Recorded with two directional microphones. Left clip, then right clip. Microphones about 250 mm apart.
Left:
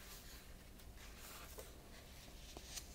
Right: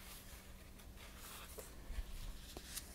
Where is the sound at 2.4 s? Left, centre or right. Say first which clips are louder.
Right 1 dB; centre.